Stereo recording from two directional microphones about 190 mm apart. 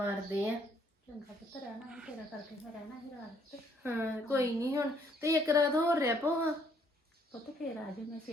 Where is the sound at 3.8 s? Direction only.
15° right (ahead or behind).